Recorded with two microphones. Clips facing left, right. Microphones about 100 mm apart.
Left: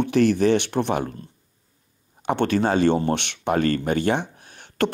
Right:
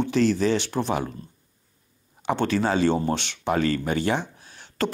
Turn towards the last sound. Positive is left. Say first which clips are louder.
# left 4 dB
turn(degrees=55)  # may be behind; listen again after turning